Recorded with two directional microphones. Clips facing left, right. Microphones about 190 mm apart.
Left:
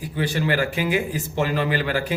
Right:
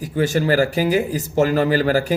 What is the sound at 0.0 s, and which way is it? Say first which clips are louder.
A man's voice: right 5 dB; 45° right (ahead or behind).